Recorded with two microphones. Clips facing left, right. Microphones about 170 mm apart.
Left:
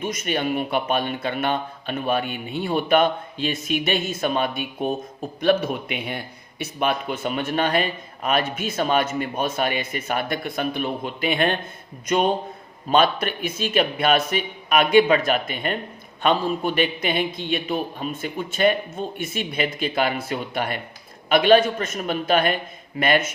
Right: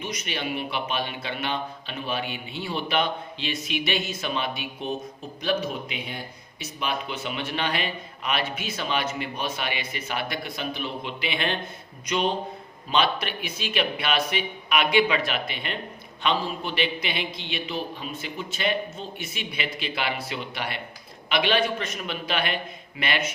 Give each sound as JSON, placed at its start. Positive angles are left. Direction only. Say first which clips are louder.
{"t": 0.0, "sound": "a man's voice", "louder": "left 7 dB", "side_deg": 50}